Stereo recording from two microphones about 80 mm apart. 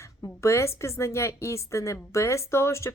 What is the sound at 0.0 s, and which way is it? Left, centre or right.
A woman's voice, left.